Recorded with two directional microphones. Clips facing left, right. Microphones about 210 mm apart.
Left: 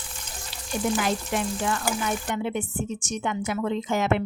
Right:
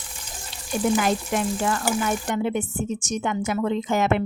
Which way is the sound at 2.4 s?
45° right (ahead or behind).